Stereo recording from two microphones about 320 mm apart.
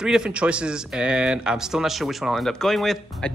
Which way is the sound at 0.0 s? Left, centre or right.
Centre.